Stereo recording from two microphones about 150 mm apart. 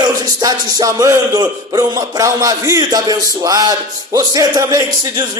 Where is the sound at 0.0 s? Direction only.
25° right (ahead or behind).